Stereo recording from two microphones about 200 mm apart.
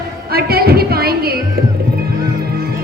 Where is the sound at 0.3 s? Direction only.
50° right (ahead or behind).